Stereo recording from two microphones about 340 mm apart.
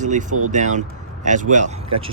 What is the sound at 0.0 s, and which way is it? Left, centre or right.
Speech, right.